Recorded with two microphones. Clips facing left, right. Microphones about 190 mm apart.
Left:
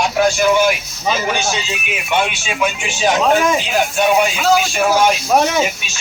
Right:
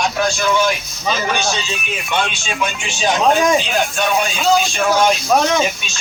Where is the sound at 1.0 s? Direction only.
25° left (ahead or behind).